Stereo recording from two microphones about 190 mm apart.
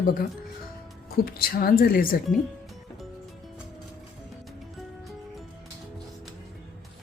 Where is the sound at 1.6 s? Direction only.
50° left (ahead or behind).